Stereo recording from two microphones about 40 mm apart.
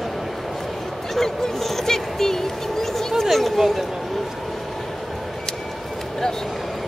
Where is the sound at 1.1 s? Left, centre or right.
Centre.